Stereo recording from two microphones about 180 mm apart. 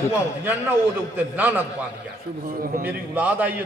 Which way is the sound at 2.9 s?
10° right (ahead or behind).